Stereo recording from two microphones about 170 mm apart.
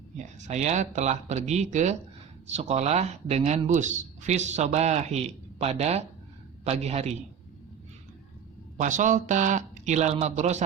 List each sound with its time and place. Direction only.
0.2 s a man's voice: 45° right (ahead or behind)
8.8 s speech: 45° right (ahead or behind)